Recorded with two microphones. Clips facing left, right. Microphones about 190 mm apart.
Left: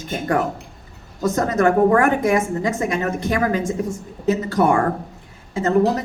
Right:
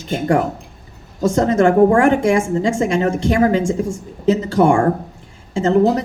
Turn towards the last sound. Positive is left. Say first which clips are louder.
# right 3 dB
turn(degrees=-25)  # may be behind; listen again after turning